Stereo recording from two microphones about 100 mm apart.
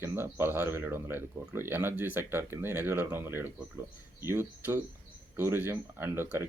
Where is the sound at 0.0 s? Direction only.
20° right (ahead or behind).